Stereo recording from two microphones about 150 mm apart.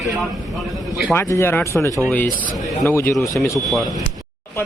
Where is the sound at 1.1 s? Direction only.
20° left (ahead or behind).